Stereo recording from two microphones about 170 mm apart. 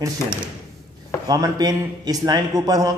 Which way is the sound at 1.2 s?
20° right (ahead or behind).